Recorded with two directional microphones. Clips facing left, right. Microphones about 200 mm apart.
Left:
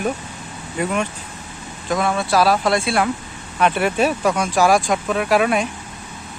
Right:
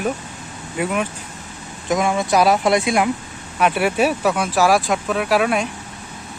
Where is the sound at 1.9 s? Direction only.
15° right (ahead or behind).